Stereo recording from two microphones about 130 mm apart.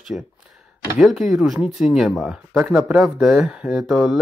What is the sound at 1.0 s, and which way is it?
Speech, centre (ahead or behind).